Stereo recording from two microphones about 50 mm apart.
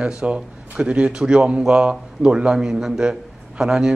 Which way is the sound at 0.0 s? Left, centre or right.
Centre.